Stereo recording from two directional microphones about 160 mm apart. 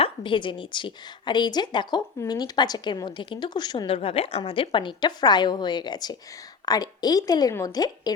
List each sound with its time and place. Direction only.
0.0 s a woman's voice: 30° left (ahead or behind)
3.9 s a woman's voice: 35° left (ahead or behind)